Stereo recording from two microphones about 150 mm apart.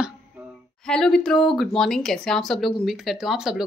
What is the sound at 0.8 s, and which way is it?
Speech, 5° left (ahead or behind).